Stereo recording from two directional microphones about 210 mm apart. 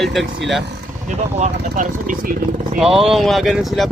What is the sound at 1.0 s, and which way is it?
Speech, 35° right (ahead or behind).